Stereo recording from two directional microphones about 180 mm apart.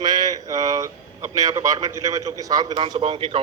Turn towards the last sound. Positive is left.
turn(degrees=-30)  # may be behind; listen again after turning